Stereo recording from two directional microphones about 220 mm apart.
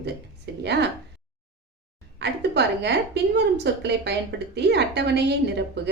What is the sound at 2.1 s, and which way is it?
A woman's voice, 50° right (ahead or behind).